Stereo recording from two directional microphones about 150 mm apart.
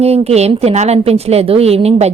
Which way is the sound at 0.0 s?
45° right (ahead or behind).